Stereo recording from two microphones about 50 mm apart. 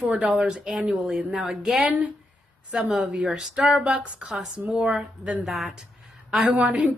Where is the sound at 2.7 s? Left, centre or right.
Centre.